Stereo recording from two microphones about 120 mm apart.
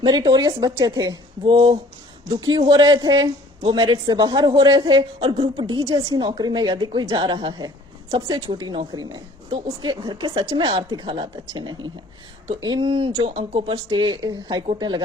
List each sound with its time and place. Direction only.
0.0 s speech: 40° right (ahead or behind)
1.5 s a woman's voice: 45° right (ahead or behind)
5.6 s a woman's voice: 30° right (ahead or behind)